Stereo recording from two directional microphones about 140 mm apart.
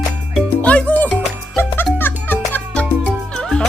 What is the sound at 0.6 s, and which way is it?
Music, 10° left (ahead or behind).